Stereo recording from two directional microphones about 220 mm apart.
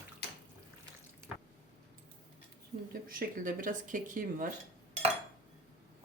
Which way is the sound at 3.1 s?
40° right (ahead or behind).